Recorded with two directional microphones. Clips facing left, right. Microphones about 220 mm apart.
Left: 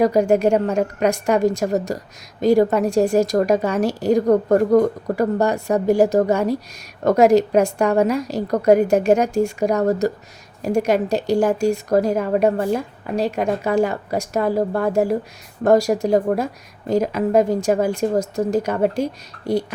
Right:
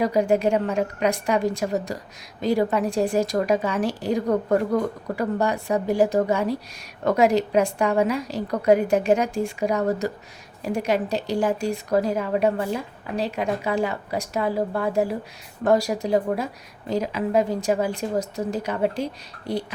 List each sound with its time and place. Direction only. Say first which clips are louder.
0.0 s speech: left 5 dB; 45° left (ahead or behind)